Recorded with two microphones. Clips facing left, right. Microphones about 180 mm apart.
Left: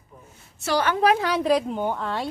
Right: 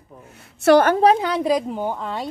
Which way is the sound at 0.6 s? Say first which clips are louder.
Right 10 dB; 55° right (ahead or behind).